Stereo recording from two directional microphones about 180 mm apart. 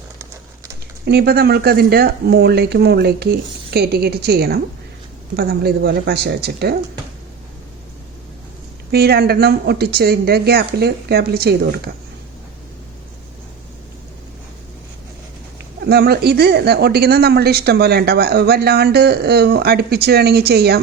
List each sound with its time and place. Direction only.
1.0 s speech: 60° right (ahead or behind)
8.9 s speech: 60° right (ahead or behind)
15.8 s speech: 60° right (ahead or behind)